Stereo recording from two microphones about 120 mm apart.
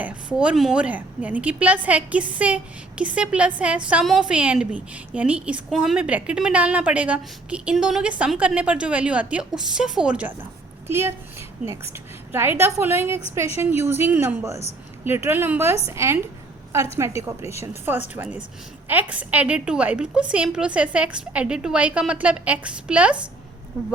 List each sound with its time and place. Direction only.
0.0 s a woman's voice: 10° right (ahead or behind)
10.8 s a woman's voice: 20° right (ahead or behind)